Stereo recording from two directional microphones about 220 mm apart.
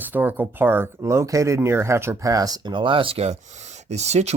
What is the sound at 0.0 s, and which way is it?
Speech, 10° right (ahead or behind).